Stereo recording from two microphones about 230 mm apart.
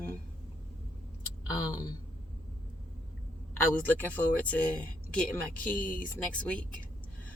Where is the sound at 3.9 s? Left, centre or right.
Centre.